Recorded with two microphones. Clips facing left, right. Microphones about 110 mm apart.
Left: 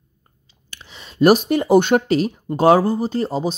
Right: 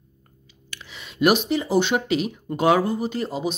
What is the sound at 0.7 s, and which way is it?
Speech, 35° left (ahead or behind).